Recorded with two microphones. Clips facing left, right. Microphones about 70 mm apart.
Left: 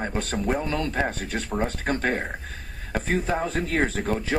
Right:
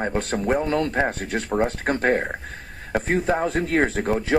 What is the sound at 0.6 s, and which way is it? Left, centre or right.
Speech, right.